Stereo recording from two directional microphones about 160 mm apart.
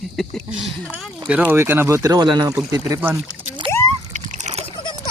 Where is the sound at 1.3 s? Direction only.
10° right (ahead or behind).